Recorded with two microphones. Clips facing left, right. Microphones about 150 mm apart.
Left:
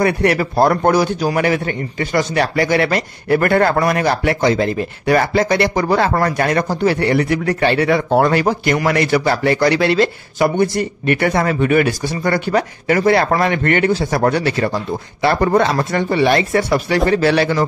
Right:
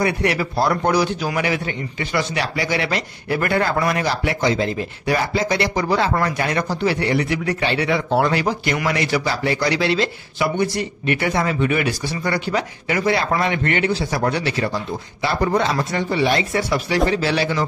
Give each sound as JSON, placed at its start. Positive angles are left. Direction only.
{"t": 0.0, "sound": "a man's voice", "side_deg": 50}